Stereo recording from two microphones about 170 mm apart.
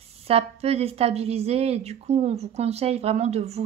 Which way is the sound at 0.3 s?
35° right (ahead or behind).